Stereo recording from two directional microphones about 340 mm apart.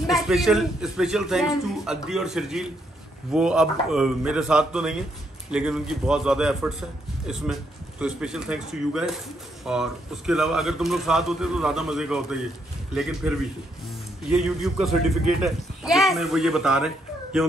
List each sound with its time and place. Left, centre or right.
0.1 s speech: centre
14.3 s speech: centre